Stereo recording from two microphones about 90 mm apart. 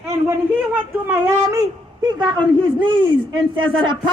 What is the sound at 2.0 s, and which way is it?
A man's voice, 60° right (ahead or behind).